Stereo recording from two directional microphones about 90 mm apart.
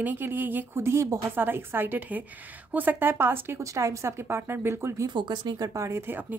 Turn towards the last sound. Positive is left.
turn(degrees=-25)  # may be behind; listen again after turning